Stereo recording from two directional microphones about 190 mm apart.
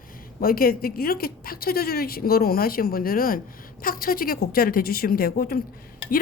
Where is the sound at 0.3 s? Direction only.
50° left (ahead or behind).